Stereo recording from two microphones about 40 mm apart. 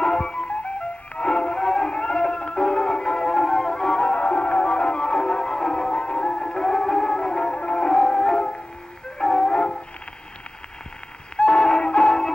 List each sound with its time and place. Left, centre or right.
0.0 s music: centre
0.5 s music: left
11.3 s music: left